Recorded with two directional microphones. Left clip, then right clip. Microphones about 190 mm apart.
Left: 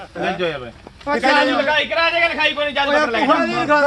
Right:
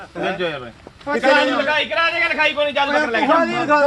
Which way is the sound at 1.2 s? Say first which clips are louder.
Even; centre (ahead or behind).